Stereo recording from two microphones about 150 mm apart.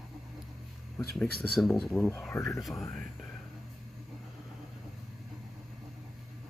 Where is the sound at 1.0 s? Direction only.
Centre (ahead or behind).